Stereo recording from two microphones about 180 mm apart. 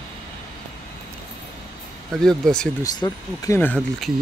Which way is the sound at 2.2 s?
5° left (ahead or behind).